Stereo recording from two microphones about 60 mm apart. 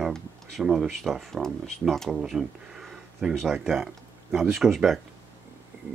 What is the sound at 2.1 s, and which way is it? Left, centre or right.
Speech, centre.